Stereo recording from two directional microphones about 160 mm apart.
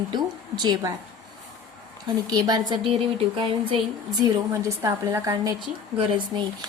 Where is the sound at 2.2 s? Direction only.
25° right (ahead or behind).